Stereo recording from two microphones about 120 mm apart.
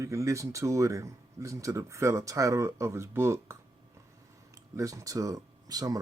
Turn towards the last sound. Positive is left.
turn(degrees=-30)  # may be behind; listen again after turning